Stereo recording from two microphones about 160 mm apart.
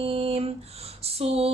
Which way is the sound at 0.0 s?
35° right (ahead or behind).